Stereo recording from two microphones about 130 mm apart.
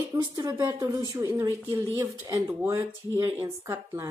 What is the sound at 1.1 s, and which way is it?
A woman's voice, 15° right (ahead or behind).